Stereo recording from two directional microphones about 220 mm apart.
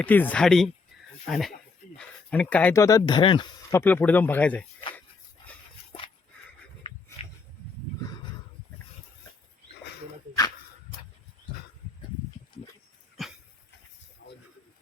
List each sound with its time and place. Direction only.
0.0 s speech: 5° left (ahead or behind)
13.2 s dog: centre (ahead or behind)
14.2 s a sound: 45° left (ahead or behind)